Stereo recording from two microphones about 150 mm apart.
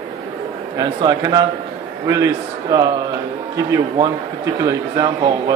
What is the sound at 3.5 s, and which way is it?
A man's voice, 20° right (ahead or behind).